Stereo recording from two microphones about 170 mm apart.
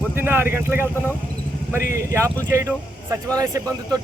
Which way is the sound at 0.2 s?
15° right (ahead or behind).